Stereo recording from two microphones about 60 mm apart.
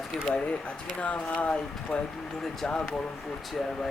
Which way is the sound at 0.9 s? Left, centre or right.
Left.